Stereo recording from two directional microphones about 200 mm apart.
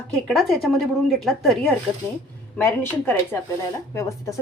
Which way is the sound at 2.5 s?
10° left (ahead or behind).